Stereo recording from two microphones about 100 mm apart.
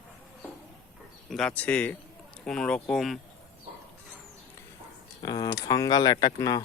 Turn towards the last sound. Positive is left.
turn(degrees=35)  # may be behind; listen again after turning